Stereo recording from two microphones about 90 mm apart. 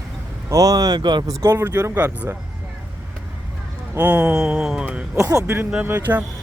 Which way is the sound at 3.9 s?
15° right (ahead or behind).